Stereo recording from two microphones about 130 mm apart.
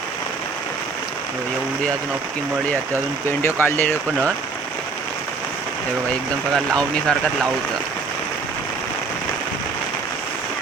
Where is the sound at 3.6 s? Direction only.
15° left (ahead or behind).